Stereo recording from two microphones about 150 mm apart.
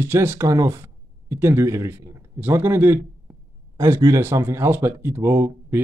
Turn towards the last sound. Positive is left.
turn(degrees=-15)  # may be behind; listen again after turning